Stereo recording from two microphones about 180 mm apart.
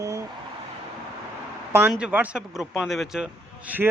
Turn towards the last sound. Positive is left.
turn(degrees=-10)  # may be behind; listen again after turning